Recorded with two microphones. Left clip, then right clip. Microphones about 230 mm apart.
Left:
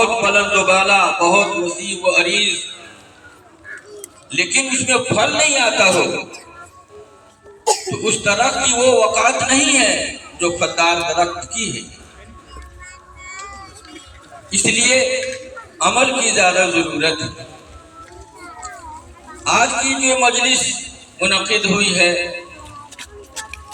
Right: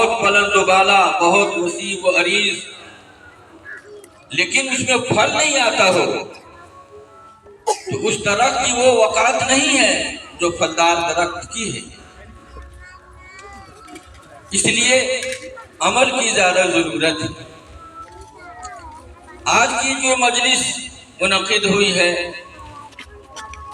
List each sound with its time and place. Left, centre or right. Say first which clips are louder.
0.0 s speech: even; centre
4.3 s speech: even; centre
7.6 s speech: left 3 dB; left
7.9 s speech: left 1 dB; centre
13.2 s children playing: left 6 dB; left
14.5 s speech: even; centre
19.5 s speech: even; centre
23.0 s music: left 2 dB; left